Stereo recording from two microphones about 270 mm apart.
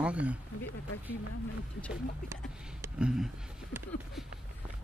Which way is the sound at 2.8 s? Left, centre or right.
Centre.